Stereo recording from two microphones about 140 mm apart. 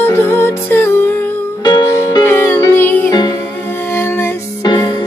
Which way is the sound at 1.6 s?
30° left (ahead or behind).